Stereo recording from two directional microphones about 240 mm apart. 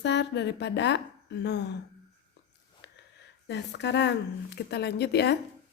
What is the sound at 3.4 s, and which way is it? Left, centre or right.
Speech, left.